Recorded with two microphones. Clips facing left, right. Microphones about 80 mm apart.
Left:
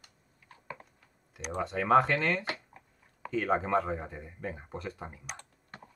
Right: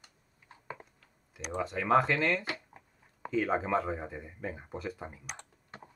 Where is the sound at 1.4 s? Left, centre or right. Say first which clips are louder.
Left 1 dB; centre.